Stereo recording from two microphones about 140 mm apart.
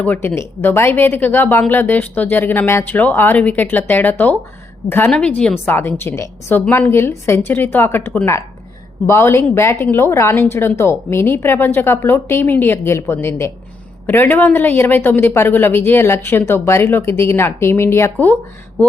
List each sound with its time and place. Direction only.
0.0 s a woman's voice: 15° left (ahead or behind)